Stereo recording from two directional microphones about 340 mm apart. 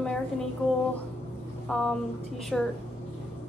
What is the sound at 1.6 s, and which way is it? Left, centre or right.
Speech, centre.